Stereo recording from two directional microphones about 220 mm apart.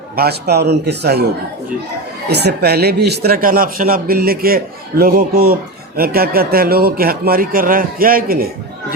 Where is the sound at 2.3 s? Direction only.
50° right (ahead or behind).